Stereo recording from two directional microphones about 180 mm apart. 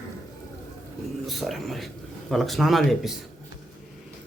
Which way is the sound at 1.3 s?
Centre (ahead or behind).